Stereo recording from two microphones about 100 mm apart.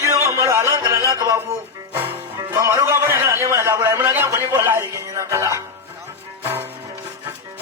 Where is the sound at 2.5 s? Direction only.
30° right (ahead or behind).